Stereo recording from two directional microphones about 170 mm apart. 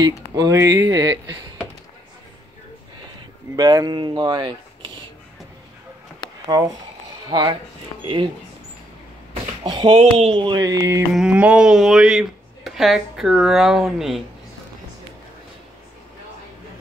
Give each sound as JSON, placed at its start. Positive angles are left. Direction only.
{"t": 0.0, "sound": "speech", "side_deg": -20}
{"t": 3.5, "sound": "speech", "side_deg": -20}
{"t": 7.2, "sound": "speech", "side_deg": -25}
{"t": 9.6, "sound": "speech", "side_deg": -25}